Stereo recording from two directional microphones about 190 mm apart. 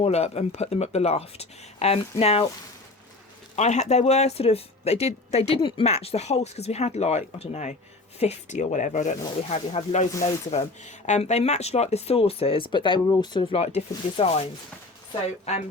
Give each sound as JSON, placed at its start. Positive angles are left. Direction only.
{"t": 0.0, "sound": "speech", "side_deg": 35}
{"t": 3.5, "sound": "speech", "side_deg": 35}